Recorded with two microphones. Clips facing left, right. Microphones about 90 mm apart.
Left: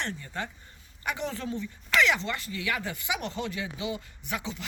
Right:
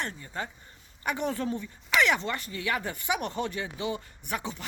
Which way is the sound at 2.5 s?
35° right (ahead or behind).